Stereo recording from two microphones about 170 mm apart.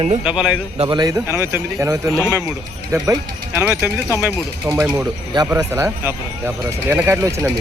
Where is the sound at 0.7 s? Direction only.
30° right (ahead or behind).